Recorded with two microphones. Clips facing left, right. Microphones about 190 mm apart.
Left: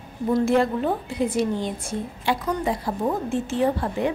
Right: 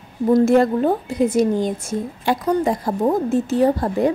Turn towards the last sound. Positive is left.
turn(degrees=-40)  # may be behind; listen again after turning